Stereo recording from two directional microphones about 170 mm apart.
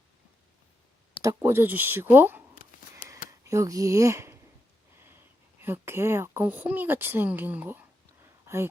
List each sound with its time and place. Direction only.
1.2 s speech: 15° right (ahead or behind)